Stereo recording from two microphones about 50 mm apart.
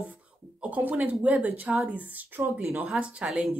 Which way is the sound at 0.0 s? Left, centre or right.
Right.